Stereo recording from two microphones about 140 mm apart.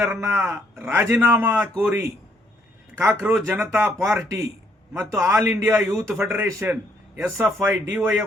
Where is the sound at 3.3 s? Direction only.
20° right (ahead or behind).